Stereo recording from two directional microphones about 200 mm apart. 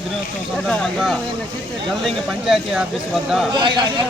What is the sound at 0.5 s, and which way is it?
Speech, centre (ahead or behind).